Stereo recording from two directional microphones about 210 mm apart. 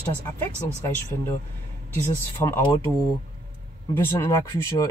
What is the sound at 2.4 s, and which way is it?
Speech, 15° left (ahead or behind).